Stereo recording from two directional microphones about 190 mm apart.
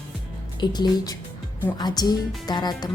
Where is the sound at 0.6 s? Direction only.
20° left (ahead or behind).